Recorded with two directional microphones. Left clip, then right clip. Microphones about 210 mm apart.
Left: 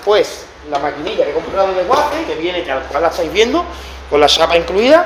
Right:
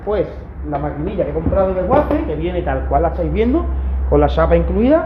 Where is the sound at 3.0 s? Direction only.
30° left (ahead or behind).